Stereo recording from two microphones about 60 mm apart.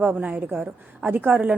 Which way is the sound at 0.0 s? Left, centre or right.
Right.